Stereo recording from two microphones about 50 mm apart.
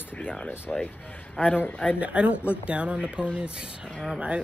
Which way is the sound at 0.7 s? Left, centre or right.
Centre.